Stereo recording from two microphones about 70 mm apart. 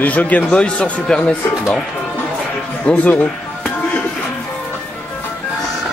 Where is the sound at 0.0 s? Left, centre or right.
Left.